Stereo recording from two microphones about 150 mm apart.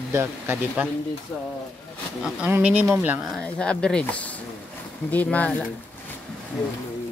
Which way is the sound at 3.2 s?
5° left (ahead or behind).